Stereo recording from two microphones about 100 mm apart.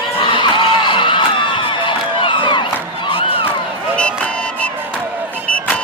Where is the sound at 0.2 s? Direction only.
55° left (ahead or behind).